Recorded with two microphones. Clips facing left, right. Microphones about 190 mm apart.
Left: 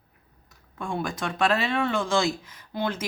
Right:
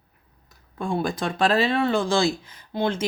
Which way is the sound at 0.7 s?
35° right (ahead or behind).